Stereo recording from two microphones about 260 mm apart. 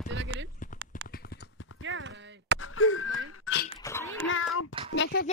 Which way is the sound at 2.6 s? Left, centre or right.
Left.